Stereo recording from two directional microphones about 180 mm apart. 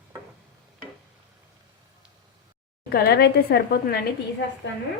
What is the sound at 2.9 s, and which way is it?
A woman's voice, 60° left (ahead or behind).